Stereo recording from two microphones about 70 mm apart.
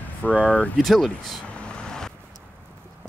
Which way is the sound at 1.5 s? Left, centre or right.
Centre.